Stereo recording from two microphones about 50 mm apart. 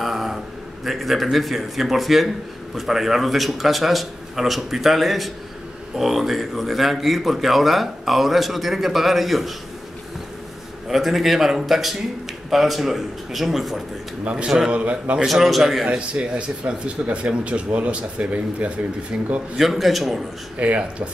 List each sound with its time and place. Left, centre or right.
0.0 s a sound: centre
0.8 s a man's voice: centre
10.9 s a man's voice: centre
14.2 s a man's voice: centre
15.2 s a man's voice: centre
15.8 s speech: centre
19.5 s a man's voice: centre
20.5 s speech: right